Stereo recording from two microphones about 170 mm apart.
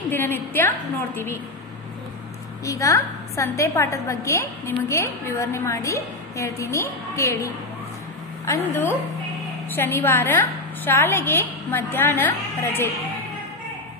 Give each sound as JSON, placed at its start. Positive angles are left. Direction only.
{"t": 0.1, "sound": "a woman's voice", "side_deg": 10}
{"t": 2.6, "sound": "a woman's voice", "side_deg": 20}
{"t": 8.5, "sound": "a woman's voice", "side_deg": 15}